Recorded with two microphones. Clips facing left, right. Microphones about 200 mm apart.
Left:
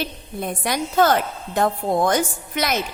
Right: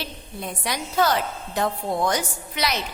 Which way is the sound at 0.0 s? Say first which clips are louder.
Left 6 dB; 50° left (ahead or behind).